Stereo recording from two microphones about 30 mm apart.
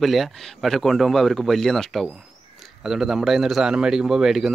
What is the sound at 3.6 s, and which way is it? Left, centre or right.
Speech, right.